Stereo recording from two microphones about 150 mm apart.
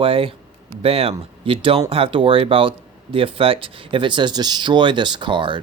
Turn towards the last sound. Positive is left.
turn(degrees=-35)  # may be behind; listen again after turning